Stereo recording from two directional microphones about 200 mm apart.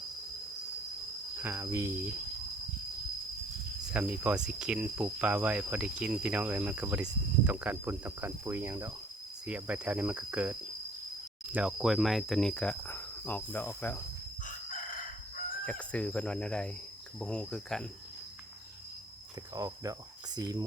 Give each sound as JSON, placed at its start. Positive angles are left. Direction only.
{"t": 1.4, "sound": "speech", "side_deg": -10}
{"t": 3.9, "sound": "speech", "side_deg": -5}
{"t": 9.5, "sound": "cricket", "side_deg": -5}
{"t": 15.6, "sound": "cricket", "side_deg": 5}
{"t": 19.5, "sound": "speech", "side_deg": -15}